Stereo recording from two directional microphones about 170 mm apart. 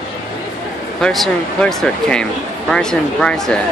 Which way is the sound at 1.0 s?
5° left (ahead or behind).